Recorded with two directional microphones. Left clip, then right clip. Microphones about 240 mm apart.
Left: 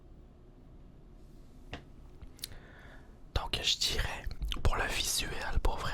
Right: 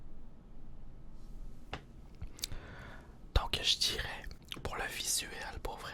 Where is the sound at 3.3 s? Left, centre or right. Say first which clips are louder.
Even; centre.